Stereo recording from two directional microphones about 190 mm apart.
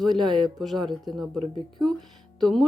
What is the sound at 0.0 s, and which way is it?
Speech, centre (ahead or behind).